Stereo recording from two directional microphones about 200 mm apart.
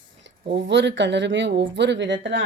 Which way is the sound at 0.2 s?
60° right (ahead or behind).